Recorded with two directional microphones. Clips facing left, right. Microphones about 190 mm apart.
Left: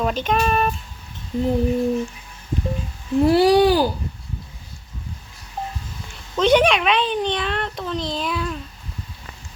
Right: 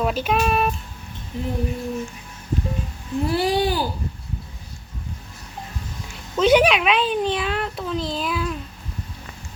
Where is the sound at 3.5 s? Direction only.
45° left (ahead or behind).